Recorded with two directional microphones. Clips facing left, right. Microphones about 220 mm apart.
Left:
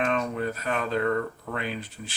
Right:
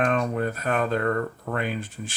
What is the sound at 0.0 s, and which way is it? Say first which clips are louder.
Speech: right 3 dB; 45° right (ahead or behind).